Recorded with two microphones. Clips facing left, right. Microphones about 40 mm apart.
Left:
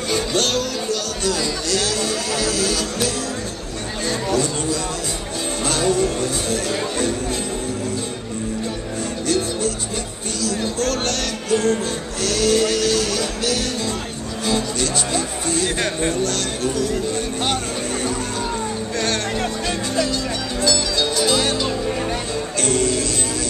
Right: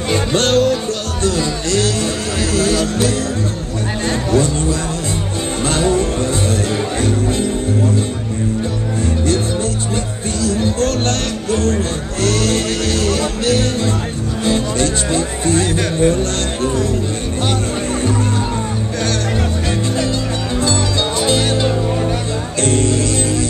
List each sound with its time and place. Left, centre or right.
0.1 s music: right
4.3 s music: right
10.5 s music: right
15.7 s music: centre
21.4 s music: centre
22.6 s music: right